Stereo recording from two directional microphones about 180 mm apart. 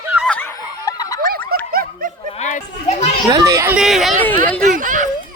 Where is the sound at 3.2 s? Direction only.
20° right (ahead or behind).